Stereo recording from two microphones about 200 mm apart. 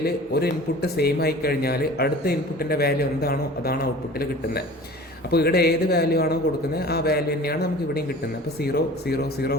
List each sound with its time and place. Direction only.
0.0 s a man's voice: 50° left (ahead or behind)
5.3 s a man's voice: 50° left (ahead or behind)